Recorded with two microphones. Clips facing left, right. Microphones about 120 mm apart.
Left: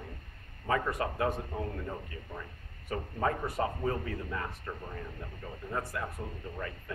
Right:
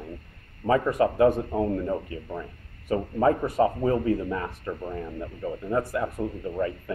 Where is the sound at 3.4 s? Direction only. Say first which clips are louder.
Right 10 dB; 90° right.